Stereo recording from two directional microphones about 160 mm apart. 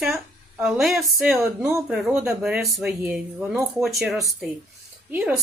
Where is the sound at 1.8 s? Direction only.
5° right (ahead or behind).